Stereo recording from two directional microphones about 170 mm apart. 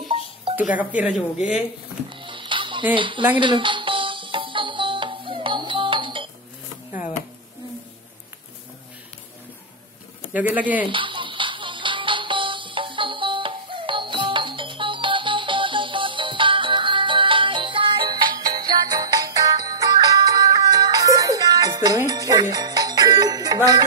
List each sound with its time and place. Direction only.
0.7 s speech: 10° right (ahead or behind)
2.0 s music: 30° right (ahead or behind)
10.3 s speech: 10° right (ahead or behind)
10.9 s music: 30° right (ahead or behind)